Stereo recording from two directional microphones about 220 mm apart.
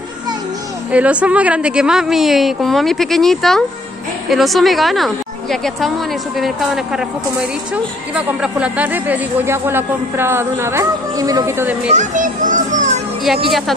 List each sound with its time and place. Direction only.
0.9 s a woman's voice: 5° right (ahead or behind)
11.9 s a child's voice: 35° right (ahead or behind)
13.5 s a woman's voice: centre (ahead or behind)